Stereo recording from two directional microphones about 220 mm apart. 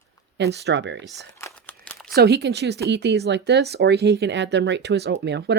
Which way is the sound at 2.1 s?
45° right (ahead or behind).